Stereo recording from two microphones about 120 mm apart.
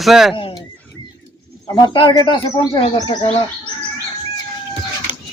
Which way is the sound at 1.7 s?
35° left (ahead or behind).